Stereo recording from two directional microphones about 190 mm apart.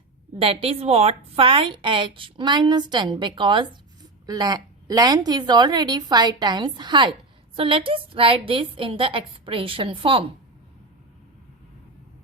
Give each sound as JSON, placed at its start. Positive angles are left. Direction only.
{"t": 0.3, "sound": "a woman's voice", "side_deg": -30}